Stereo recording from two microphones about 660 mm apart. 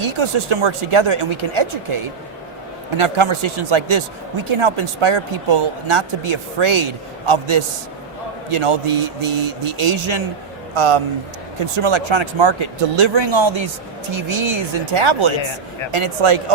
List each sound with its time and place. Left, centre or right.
0.0 s speech: right
3.0 s speech: right